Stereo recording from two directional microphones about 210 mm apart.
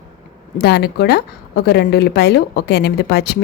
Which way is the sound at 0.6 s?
50° left (ahead or behind).